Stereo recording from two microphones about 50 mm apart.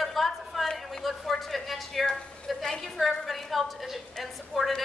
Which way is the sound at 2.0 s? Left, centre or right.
Centre.